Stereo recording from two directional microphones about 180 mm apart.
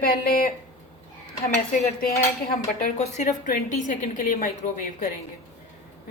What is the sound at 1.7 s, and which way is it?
Dishes, 55° left (ahead or behind).